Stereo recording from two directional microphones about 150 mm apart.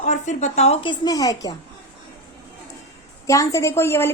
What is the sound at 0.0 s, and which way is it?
A woman's voice, 50° left (ahead or behind).